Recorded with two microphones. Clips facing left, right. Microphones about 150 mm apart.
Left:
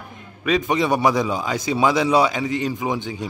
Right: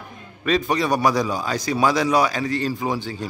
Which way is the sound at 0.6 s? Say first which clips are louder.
Left 2 dB; 20° left (ahead or behind).